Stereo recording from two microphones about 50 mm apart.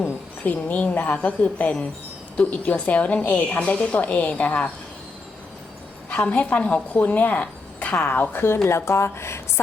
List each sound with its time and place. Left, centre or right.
0.4 s a woman's voice: left
6.1 s speech: left
8.6 s a woman's voice: left